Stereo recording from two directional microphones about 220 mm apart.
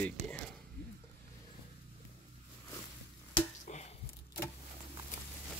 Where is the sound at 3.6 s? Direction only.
30° left (ahead or behind).